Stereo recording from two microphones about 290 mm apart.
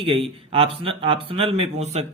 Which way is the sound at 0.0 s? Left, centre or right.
Centre.